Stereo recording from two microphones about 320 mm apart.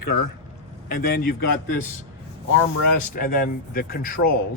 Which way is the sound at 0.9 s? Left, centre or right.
Left.